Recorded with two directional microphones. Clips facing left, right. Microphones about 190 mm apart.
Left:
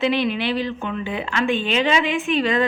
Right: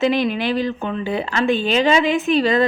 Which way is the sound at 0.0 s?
45° right (ahead or behind).